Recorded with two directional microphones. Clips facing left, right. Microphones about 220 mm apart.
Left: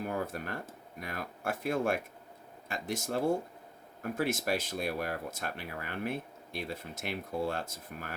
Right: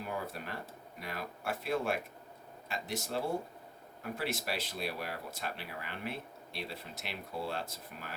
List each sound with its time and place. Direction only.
0.0 s speech: 50° left (ahead or behind)